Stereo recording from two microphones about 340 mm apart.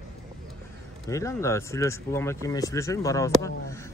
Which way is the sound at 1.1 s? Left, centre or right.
Centre.